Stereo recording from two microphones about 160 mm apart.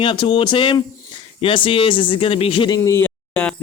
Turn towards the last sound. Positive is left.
turn(degrees=10)  # may be behind; listen again after turning